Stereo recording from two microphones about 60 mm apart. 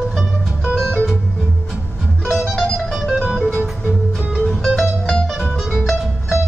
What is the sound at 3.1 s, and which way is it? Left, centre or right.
Music, right.